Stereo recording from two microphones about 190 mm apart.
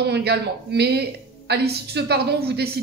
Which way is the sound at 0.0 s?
60° right (ahead or behind).